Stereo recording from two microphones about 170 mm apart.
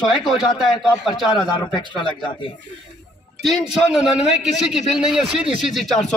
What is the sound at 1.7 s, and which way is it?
Speech, 25° left (ahead or behind).